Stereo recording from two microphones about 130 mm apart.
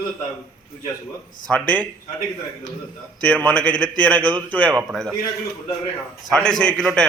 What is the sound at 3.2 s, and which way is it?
Speech, 10° left (ahead or behind).